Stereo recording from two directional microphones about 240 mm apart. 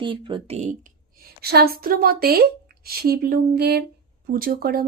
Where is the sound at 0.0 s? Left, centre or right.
Centre.